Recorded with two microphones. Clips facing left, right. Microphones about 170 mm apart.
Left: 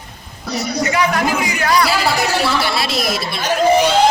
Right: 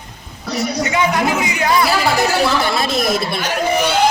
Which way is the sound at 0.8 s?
20° right (ahead or behind).